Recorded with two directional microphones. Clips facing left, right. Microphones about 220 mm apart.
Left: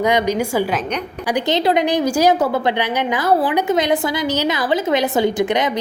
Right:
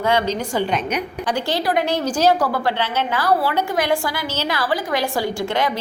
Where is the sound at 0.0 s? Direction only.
15° left (ahead or behind).